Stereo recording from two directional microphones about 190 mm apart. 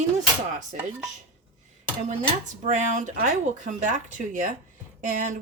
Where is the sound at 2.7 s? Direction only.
40° right (ahead or behind).